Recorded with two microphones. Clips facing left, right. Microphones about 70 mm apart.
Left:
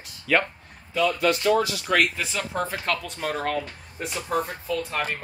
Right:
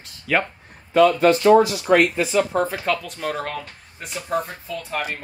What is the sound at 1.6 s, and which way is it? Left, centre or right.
Speech, right.